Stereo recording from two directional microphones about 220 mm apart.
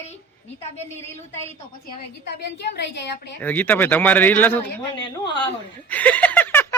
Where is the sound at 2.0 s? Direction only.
45° left (ahead or behind).